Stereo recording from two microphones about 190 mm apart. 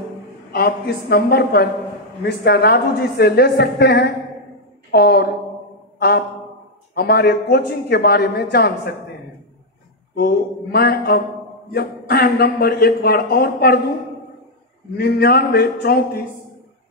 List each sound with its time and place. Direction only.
0.5 s a man's voice: 55° left (ahead or behind)
5.9 s a sound: 55° left (ahead or behind)
6.9 s a man's voice: 55° left (ahead or behind)
10.1 s a man's voice: 55° left (ahead or behind)
15.0 s a man's voice: 55° left (ahead or behind)